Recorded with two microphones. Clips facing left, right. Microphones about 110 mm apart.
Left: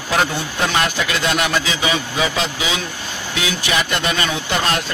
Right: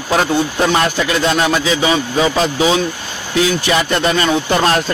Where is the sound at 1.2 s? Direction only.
35° right (ahead or behind).